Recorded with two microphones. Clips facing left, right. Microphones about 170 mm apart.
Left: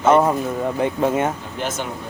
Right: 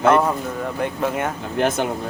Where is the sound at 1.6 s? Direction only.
60° right (ahead or behind).